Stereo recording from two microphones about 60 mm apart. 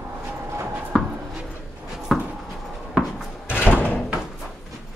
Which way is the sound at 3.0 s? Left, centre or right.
Centre.